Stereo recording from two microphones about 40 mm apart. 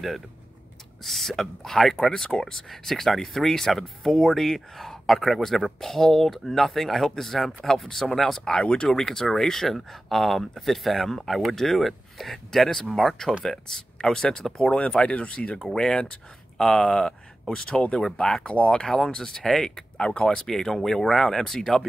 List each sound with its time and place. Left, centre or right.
1.0 s speech: centre
8.5 s speech: left
8.8 s speech: centre
13.4 s speech: centre
15.6 s speech: centre
17.7 s speech: left
18.1 s speech: centre
18.9 s speech: centre